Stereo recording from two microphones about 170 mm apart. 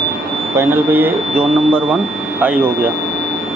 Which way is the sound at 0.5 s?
15° right (ahead or behind).